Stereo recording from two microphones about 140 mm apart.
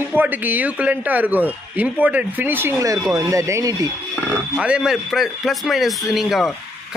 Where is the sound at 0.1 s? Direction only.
15° right (ahead or behind).